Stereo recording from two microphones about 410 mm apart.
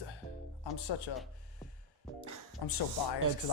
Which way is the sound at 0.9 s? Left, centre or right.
Left.